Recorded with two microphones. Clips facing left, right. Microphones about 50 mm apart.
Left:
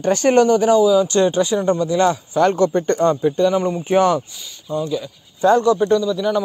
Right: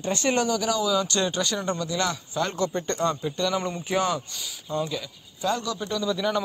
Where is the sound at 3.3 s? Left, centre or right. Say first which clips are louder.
Left 9 dB; centre.